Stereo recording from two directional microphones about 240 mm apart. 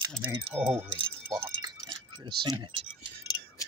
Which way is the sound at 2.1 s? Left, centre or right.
Centre.